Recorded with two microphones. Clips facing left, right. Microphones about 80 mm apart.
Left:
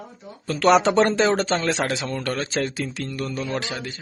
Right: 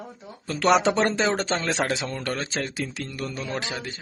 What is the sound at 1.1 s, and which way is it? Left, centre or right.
A man's voice, centre.